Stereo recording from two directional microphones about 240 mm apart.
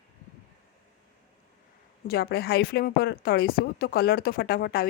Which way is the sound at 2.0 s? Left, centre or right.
Left.